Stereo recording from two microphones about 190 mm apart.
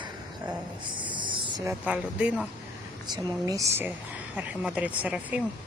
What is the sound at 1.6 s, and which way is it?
Speech, 5° right (ahead or behind).